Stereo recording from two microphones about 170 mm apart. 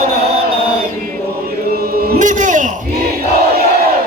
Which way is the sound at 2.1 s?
45° right (ahead or behind).